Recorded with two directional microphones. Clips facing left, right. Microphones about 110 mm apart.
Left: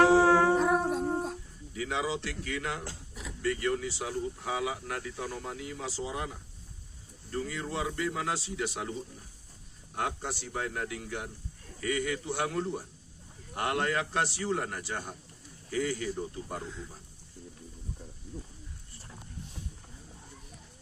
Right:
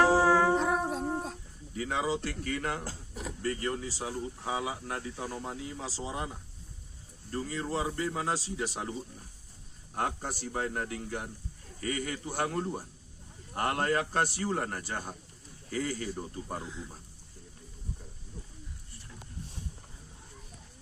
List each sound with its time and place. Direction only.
0.3 s dog: 10° left (ahead or behind)
1.7 s speech: 40° right (ahead or behind)
9.9 s speech: 40° right (ahead or behind)